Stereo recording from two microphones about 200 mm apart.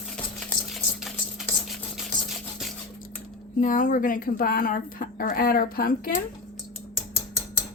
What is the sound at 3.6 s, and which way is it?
Speech, 40° left (ahead or behind).